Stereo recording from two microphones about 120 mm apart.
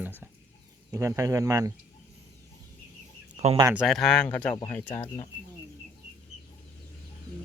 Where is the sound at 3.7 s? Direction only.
Centre (ahead or behind).